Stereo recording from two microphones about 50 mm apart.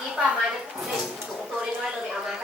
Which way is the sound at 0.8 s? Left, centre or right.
Centre.